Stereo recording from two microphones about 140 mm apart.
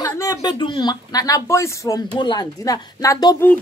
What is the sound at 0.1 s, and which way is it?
Speech, 25° left (ahead or behind).